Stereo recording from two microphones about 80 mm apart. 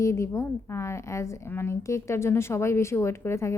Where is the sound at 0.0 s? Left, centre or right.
Left.